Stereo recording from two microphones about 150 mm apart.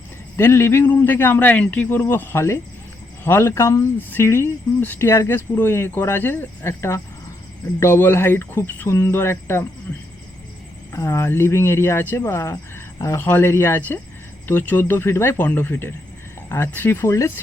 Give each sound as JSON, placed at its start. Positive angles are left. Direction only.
{"t": 0.3, "sound": "speech", "side_deg": 15}
{"t": 10.9, "sound": "speech", "side_deg": 20}